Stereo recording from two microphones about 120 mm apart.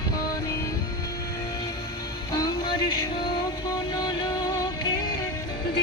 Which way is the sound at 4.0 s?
35° left (ahead or behind).